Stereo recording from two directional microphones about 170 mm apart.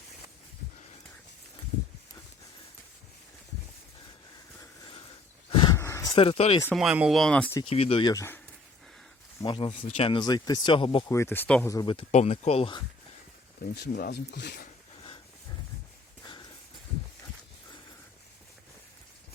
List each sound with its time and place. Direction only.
5.5 s wild animals: 30° left (ahead or behind)
5.7 s a sound: 15° left (ahead or behind)
6.1 s speech: 35° left (ahead or behind)
6.7 s speech: 5° right (ahead or behind)
7.6 s speech: 35° left (ahead or behind)
8.1 s speech: 15° left (ahead or behind)
9.4 s speech: 25° left (ahead or behind)
9.7 s speech: 45° left (ahead or behind)
10.1 s speech: 25° left (ahead or behind)
11.1 s speech: 15° left (ahead or behind)
11.7 s speech: 25° left (ahead or behind)
13.7 s speech: 70° left (ahead or behind)